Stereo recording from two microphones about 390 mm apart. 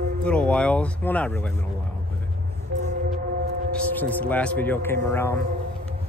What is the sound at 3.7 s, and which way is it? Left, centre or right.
Speech, centre.